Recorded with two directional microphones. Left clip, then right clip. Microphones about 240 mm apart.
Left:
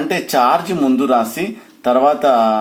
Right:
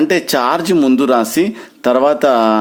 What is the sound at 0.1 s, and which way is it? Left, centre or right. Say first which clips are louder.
Speech: even; right.